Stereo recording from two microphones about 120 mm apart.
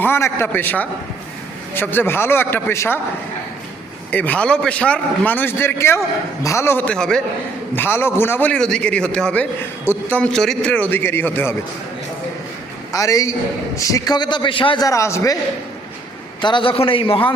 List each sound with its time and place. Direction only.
0.0 s a man's voice: 20° left (ahead or behind)
4.1 s a man's voice: 15° left (ahead or behind)
7.8 s a man's voice: 20° left (ahead or behind)
12.9 s a man's voice: 30° left (ahead or behind); by 14.8 s 45° left (ahead or behind)
14.8 s a man's voice: 25° left (ahead or behind)
16.4 s a man's voice: 40° left (ahead or behind)